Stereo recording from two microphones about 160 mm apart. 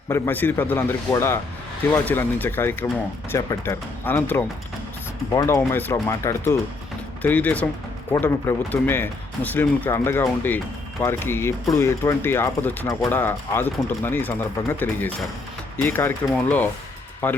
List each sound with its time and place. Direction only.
0.1 s speech: 10° left (ahead or behind)